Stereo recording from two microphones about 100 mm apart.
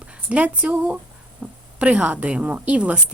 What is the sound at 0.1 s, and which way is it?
A woman's voice, 10° right (ahead or behind).